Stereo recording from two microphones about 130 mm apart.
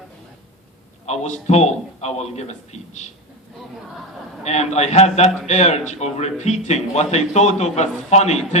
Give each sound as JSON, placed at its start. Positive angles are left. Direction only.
{"t": 1.0, "sound": "a man's voice", "side_deg": 60}
{"t": 4.4, "sound": "a man's voice", "side_deg": 60}